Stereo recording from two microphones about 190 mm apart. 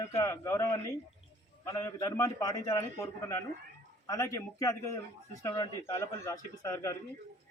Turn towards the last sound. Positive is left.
turn(degrees=15)  # may be behind; listen again after turning